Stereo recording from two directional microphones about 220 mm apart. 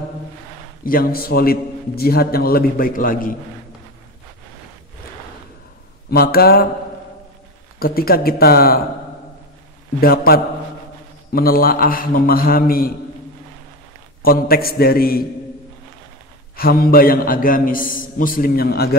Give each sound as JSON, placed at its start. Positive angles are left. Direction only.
{"t": 0.8, "sound": "a man's voice", "side_deg": 40}
{"t": 6.0, "sound": "a man's voice", "side_deg": 45}
{"t": 7.8, "sound": "a man's voice", "side_deg": 45}
{"t": 9.9, "sound": "a man's voice", "side_deg": 45}
{"t": 14.2, "sound": "a man's voice", "side_deg": 40}
{"t": 16.5, "sound": "a man's voice", "side_deg": 45}